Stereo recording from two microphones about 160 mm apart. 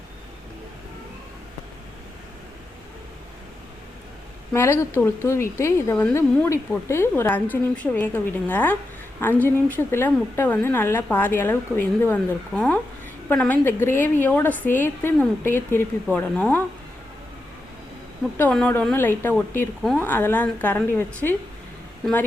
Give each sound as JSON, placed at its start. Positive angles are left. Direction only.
{"t": 4.5, "sound": "a woman's voice", "side_deg": 15}
{"t": 18.3, "sound": "a woman's voice", "side_deg": 10}